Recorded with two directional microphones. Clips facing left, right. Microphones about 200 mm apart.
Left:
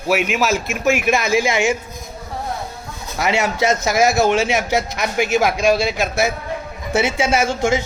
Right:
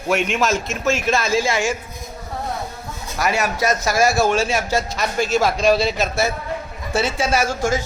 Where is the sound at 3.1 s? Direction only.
25° left (ahead or behind).